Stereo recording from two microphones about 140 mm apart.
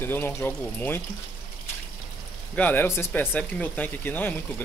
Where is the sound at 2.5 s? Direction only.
10° left (ahead or behind).